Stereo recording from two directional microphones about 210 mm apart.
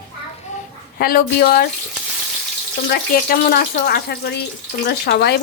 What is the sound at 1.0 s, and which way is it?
Speech, 45° left (ahead or behind).